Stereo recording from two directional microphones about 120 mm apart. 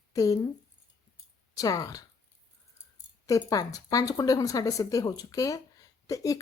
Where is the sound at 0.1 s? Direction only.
30° left (ahead or behind).